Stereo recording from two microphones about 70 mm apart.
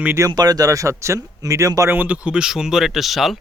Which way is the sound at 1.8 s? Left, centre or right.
Right.